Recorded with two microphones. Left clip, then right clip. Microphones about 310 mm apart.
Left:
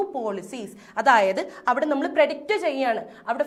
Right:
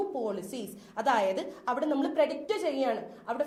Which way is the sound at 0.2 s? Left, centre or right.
Left.